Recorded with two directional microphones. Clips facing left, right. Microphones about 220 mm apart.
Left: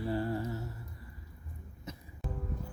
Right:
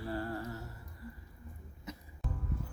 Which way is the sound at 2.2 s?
Centre (ahead or behind).